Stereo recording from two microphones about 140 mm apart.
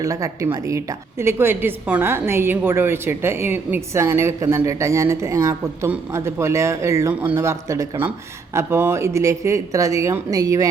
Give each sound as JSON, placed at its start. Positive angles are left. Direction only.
{"t": 0.0, "sound": "a woman's voice", "side_deg": -25}